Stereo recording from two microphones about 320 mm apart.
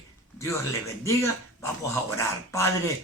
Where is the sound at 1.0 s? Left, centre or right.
Centre.